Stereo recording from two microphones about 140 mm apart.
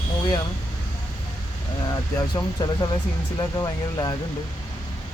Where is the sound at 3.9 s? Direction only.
30° left (ahead or behind).